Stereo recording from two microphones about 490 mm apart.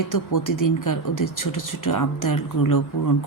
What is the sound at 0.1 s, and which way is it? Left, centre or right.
Speech, left.